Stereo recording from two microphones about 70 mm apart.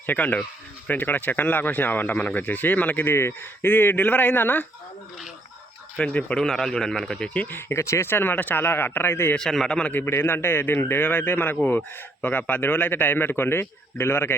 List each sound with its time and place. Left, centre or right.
0.0 s a man's voice: left
6.0 s a man's voice: centre
7.3 s a man's voice: left
7.7 s speech: left
9.3 s a man's voice: centre
9.9 s a man's voice: left